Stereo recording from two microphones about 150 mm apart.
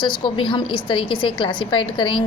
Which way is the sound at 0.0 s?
35° left (ahead or behind).